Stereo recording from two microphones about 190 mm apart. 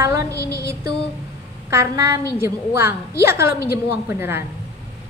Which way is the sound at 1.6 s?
15° right (ahead or behind).